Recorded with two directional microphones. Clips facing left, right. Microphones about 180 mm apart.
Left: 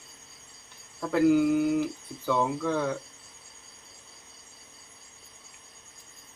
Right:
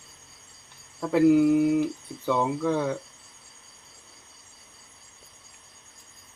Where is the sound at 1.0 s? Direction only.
15° right (ahead or behind).